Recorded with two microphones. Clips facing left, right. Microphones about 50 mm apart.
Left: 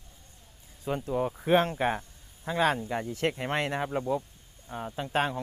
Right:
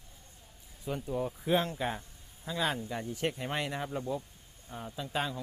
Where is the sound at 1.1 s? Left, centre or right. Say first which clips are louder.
Left 5 dB; left.